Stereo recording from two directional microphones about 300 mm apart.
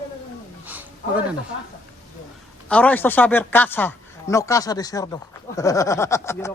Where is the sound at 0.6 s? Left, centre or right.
Centre.